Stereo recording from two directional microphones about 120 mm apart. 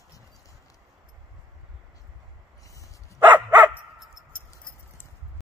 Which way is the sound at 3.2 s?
15° right (ahead or behind).